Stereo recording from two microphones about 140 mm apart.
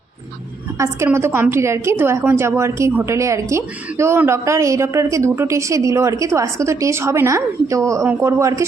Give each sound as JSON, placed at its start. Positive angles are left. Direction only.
{"t": 0.8, "sound": "a woman's voice", "side_deg": -20}